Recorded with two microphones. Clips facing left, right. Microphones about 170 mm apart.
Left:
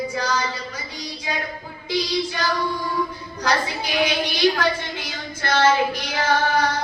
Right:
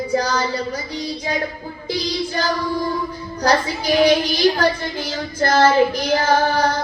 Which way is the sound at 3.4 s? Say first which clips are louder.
Right 5 dB; 40° right (ahead or behind).